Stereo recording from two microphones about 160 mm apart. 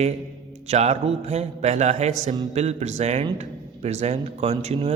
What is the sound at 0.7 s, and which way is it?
A man's voice, 45° right (ahead or behind).